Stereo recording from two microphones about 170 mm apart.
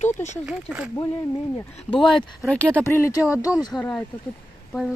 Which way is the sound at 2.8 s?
15° left (ahead or behind).